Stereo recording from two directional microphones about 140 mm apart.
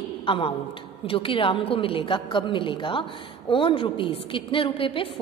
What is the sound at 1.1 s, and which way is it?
A woman's voice, 40° left (ahead or behind).